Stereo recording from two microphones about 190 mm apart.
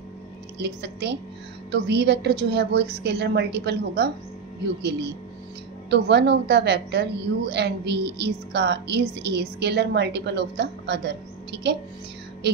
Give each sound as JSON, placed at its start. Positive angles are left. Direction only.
{"t": 0.6, "sound": "a woman's voice", "side_deg": -60}